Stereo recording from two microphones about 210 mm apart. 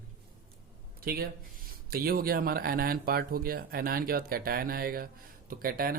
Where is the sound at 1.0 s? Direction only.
45° right (ahead or behind).